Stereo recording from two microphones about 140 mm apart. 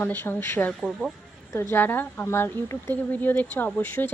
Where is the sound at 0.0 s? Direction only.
15° left (ahead or behind).